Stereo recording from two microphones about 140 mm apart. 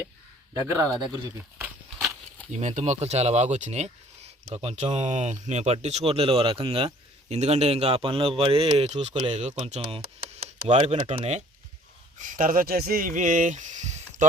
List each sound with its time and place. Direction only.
0.5 s speech: 25° right (ahead or behind)
2.5 s speech: 60° right (ahead or behind)
12.2 s speech: 70° right (ahead or behind)